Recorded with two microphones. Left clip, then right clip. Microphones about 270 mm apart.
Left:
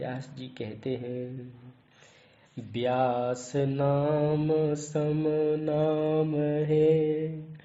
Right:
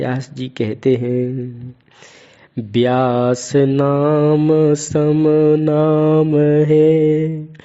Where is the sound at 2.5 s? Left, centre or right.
Right.